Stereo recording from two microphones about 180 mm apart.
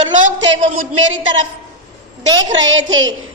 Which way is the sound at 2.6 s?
90° right.